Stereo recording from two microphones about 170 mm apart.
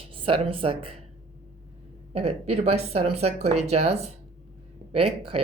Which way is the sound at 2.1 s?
40° right (ahead or behind).